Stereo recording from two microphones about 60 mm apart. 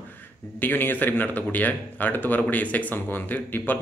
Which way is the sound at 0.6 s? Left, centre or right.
Left.